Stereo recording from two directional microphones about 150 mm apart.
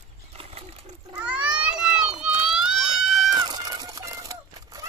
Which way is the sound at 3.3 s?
30° right (ahead or behind).